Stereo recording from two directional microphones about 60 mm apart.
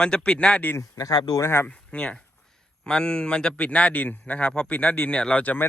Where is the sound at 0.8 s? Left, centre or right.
Left.